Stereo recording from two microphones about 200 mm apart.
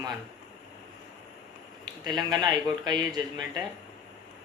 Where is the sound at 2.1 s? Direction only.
20° right (ahead or behind).